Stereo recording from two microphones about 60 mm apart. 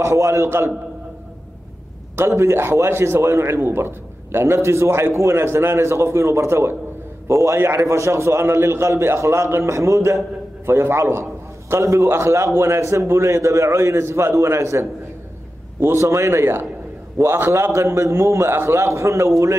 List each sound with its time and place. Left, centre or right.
0.0 s a man's voice: right
2.1 s a man's voice: right
10.6 s a man's voice: right
16.0 s a man's voice: right